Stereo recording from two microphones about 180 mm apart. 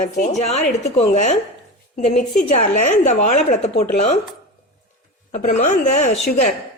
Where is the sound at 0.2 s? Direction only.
40° left (ahead or behind).